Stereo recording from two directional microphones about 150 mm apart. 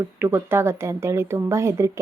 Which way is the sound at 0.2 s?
15° right (ahead or behind).